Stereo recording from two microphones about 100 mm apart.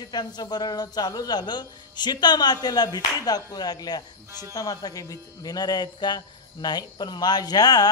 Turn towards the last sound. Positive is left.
turn(degrees=40)  # may be behind; listen again after turning